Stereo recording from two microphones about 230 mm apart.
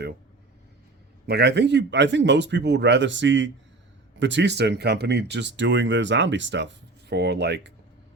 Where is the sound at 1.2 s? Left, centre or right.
Right.